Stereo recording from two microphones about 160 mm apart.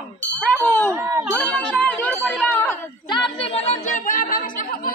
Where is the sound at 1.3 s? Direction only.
10° left (ahead or behind).